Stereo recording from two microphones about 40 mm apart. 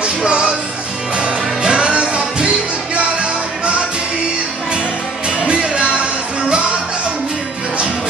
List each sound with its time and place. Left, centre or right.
0.0 s music: right
5.4 s music: right